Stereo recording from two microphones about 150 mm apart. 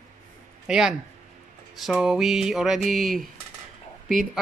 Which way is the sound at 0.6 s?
5° right (ahead or behind).